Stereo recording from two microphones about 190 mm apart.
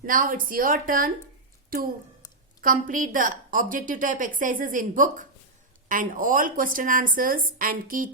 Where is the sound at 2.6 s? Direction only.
45° right (ahead or behind).